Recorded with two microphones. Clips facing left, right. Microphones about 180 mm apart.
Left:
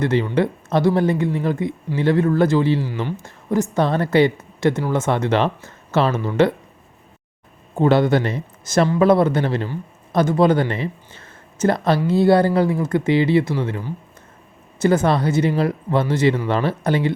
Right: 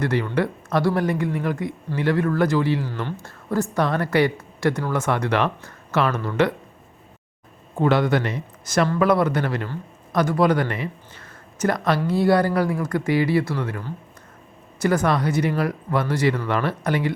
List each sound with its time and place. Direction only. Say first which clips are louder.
0.0 s a woman's voice: left 4 dB; 25° left (ahead or behind)
2.8 s a woman's voice: left 3 dB; 10° left (ahead or behind); by 6.5 s 30° left (ahead or behind)
7.8 s a woman's voice: left 4 dB; 25° left (ahead or behind)